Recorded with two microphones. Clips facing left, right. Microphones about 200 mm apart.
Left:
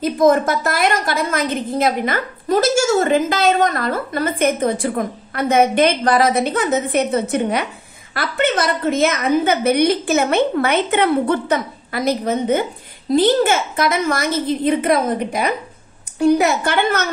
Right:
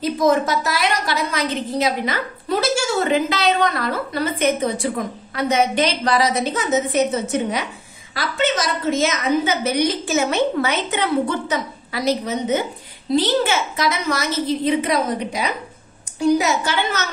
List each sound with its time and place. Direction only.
0.0 s a woman's voice: 50° left (ahead or behind)